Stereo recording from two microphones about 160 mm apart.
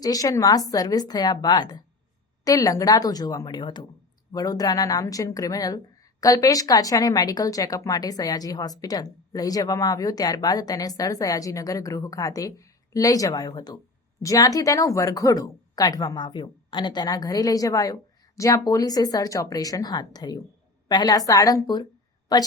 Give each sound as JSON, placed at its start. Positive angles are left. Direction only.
{"t": 0.0, "sound": "a woman's voice", "side_deg": 20}